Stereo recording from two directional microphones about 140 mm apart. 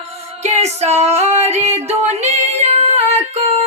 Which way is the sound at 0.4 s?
50° right (ahead or behind).